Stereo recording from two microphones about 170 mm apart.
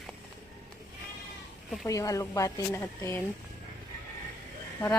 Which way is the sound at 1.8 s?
20° left (ahead or behind).